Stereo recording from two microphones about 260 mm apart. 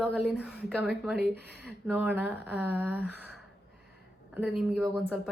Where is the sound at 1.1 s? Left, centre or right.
Right.